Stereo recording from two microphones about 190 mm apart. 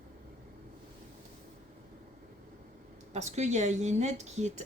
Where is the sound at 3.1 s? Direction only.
35° right (ahead or behind).